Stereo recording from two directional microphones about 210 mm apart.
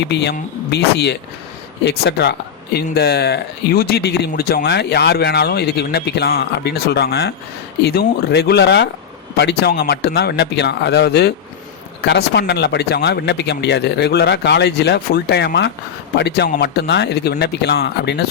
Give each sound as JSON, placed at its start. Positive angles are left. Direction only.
{"t": 0.0, "sound": "speech", "side_deg": 50}